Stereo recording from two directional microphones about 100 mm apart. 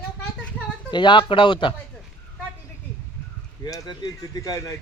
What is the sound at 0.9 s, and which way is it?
Speech, 50° left (ahead or behind).